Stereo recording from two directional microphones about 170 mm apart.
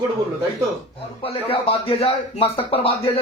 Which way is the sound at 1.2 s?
35° left (ahead or behind).